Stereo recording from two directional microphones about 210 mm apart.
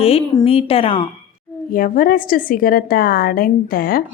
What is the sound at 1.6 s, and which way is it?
A woman's voice, 40° left (ahead or behind).